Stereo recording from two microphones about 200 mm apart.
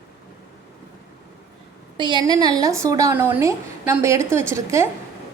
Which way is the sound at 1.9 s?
25° right (ahead or behind).